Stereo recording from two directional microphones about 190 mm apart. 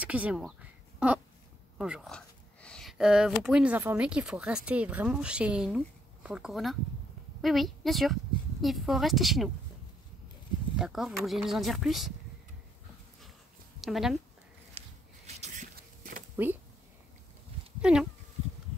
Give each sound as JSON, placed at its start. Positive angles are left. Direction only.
{"t": 0.0, "sound": "a sound", "side_deg": -5}
{"t": 1.8, "sound": "a woman's voice", "side_deg": 0}
{"t": 10.8, "sound": "speech", "side_deg": 0}
{"t": 13.7, "sound": "speech", "side_deg": 0}
{"t": 14.7, "sound": "a sound", "side_deg": -35}
{"t": 16.4, "sound": "speech", "side_deg": -10}
{"t": 17.9, "sound": "speech", "side_deg": -5}